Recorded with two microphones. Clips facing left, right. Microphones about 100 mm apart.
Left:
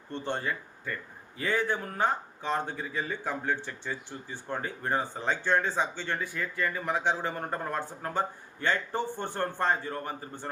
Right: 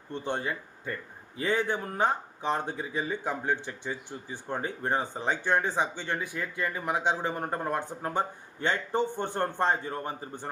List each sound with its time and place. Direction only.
0.1 s a man's voice: 15° right (ahead or behind)